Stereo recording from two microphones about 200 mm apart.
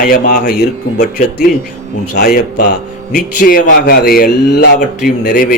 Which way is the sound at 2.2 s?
50° left (ahead or behind).